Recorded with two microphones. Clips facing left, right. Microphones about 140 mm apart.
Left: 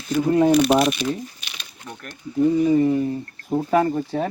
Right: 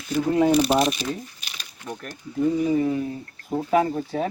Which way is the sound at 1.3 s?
40° right (ahead or behind).